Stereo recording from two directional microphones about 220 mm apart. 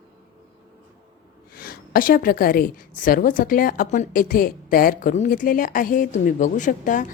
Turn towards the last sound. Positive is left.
turn(degrees=35)  # may be behind; listen again after turning